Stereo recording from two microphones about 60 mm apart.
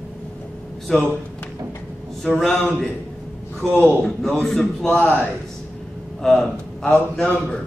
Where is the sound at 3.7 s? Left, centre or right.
Right.